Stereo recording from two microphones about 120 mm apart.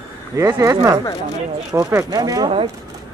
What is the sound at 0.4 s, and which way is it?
Speech, 25° right (ahead or behind).